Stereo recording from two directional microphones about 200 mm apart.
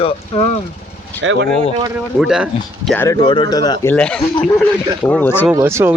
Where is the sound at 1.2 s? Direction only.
75° right (ahead or behind).